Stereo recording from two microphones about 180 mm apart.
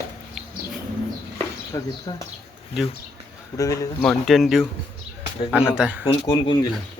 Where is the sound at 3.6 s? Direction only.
20° left (ahead or behind).